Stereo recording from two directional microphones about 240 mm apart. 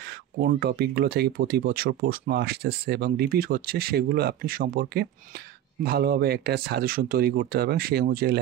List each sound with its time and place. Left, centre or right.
0.4 s speech: right